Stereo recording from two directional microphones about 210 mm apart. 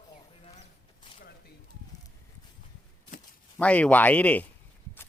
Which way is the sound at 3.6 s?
5° left (ahead or behind).